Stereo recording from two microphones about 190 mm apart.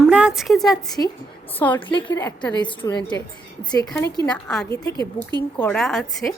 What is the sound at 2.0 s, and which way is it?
A woman's voice, 20° left (ahead or behind).